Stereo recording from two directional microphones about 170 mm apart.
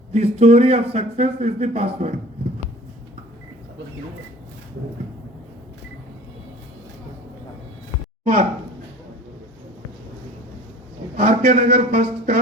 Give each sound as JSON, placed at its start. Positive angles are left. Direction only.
{"t": 0.1, "sound": "a man's voice", "side_deg": -40}
{"t": 8.2, "sound": "speech", "side_deg": -55}
{"t": 11.2, "sound": "speech", "side_deg": -50}